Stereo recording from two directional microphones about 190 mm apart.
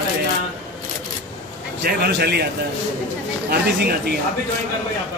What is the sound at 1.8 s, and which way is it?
Speech, 55° right (ahead or behind).